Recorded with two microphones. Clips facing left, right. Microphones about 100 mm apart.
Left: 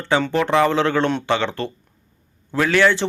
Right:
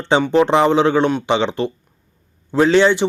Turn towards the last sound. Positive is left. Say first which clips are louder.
# right 4 dB
turn(degrees=-20)  # may be behind; listen again after turning